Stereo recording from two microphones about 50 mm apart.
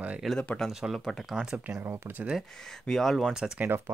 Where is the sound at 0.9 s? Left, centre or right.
Centre.